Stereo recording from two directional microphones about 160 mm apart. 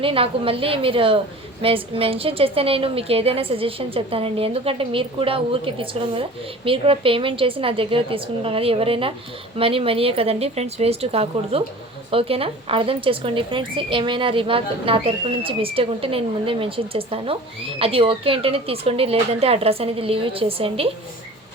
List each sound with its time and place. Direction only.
0.0 s speech: 35° right (ahead or behind)